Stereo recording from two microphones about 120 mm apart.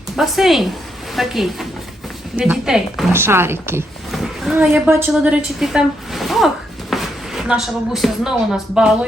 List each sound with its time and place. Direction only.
0.2 s a woman's voice: centre (ahead or behind)
3.1 s a woman's voice: 20° right (ahead or behind)
4.1 s a sound: centre (ahead or behind)
4.5 s a woman's voice: 5° right (ahead or behind)